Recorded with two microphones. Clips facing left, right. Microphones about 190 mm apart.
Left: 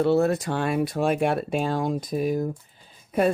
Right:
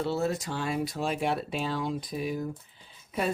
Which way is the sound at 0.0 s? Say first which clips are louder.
Left 8 dB; 60° left (ahead or behind).